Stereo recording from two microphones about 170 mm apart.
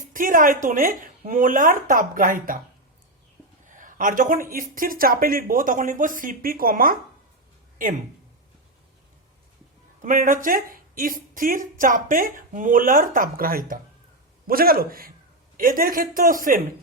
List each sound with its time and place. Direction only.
0.1 s a woman's voice: 55° right (ahead or behind)
3.7 s a woman's voice: 50° right (ahead or behind)
10.0 s a woman's voice: 55° right (ahead or behind)